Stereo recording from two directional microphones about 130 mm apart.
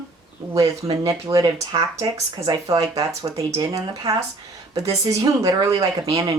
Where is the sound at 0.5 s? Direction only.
25° right (ahead or behind).